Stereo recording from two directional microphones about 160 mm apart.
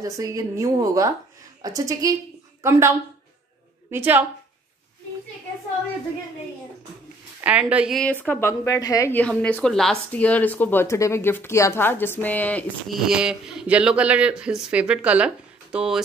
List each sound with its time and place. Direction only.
0.0 s a woman's voice: 20° right (ahead or behind)
3.9 s speech: 10° right (ahead or behind)
7.4 s speech: 10° right (ahead or behind)
8.3 s a woman's voice: 15° left (ahead or behind)
12.9 s speech: 5° right (ahead or behind)